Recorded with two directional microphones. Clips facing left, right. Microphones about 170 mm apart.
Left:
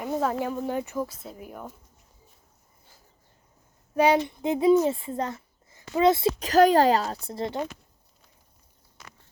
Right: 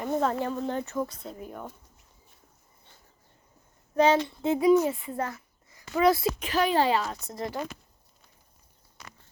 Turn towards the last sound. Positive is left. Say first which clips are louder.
# left 3 dB
turn(degrees=25)  # may be behind; listen again after turning